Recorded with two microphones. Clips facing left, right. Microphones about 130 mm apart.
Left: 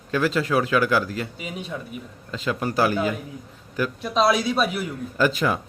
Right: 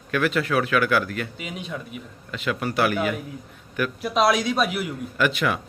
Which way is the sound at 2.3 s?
30° left (ahead or behind).